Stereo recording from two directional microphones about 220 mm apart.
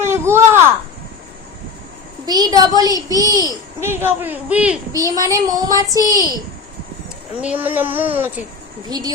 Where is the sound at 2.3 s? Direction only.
15° right (ahead or behind).